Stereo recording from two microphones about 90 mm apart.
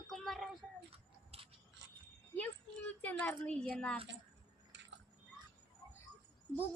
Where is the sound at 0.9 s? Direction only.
90° right.